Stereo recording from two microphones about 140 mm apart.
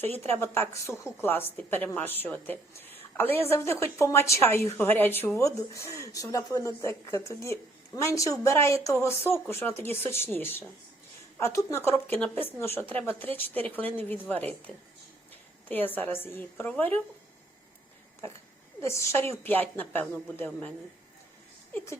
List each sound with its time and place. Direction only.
0.2 s a woman's voice: 15° left (ahead or behind)
15.7 s a woman's voice: 15° left (ahead or behind)
18.8 s a woman's voice: 20° left (ahead or behind)